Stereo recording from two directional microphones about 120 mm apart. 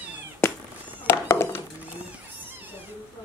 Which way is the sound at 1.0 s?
20° left (ahead or behind).